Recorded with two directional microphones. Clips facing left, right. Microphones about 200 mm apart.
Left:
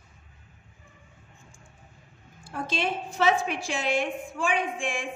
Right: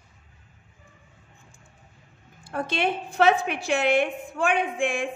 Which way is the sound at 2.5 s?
60° right (ahead or behind).